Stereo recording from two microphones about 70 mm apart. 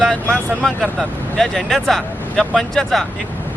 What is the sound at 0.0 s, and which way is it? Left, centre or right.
Speech, centre.